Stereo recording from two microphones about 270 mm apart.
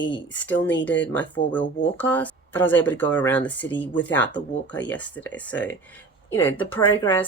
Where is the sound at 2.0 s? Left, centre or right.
Centre.